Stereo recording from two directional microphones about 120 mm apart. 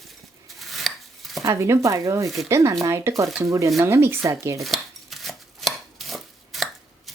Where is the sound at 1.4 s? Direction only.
25° right (ahead or behind).